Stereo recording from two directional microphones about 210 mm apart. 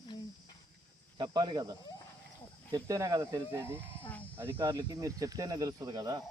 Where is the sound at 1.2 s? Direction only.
20° right (ahead or behind).